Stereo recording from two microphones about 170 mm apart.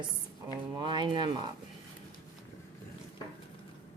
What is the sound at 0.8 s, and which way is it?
Speech, 30° right (ahead or behind).